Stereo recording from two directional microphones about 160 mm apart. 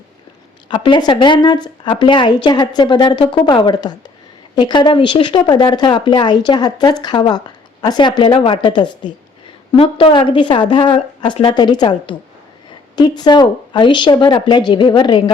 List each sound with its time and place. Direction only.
0.7 s speech: 30° left (ahead or behind)